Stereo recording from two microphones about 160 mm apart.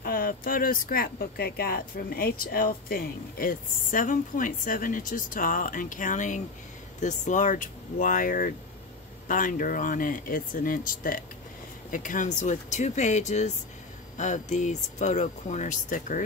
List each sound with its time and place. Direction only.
0.0 s speech: 65° left (ahead or behind)